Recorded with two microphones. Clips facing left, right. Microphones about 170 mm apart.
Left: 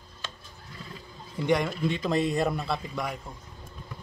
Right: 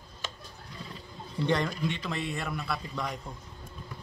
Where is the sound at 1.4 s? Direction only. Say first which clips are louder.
Left 3 dB; 10° left (ahead or behind).